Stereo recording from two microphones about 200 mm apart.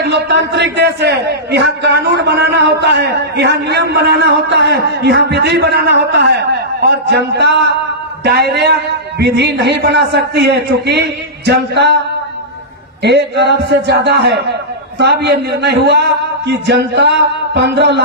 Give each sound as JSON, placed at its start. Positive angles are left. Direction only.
{"t": 0.0, "sound": "a man's voice", "side_deg": -60}
{"t": 13.0, "sound": "a man's voice", "side_deg": -55}